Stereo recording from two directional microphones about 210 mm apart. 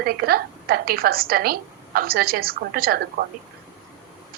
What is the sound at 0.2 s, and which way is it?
Female singing, 45° right (ahead or behind).